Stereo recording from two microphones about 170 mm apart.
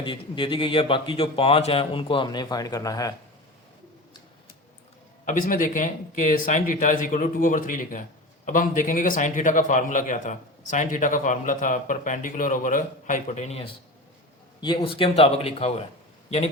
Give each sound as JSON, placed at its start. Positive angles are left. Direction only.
{"t": 0.0, "sound": "speech", "side_deg": 30}
{"t": 5.2, "sound": "a man's voice", "side_deg": 50}
{"t": 14.6, "sound": "speech", "side_deg": 30}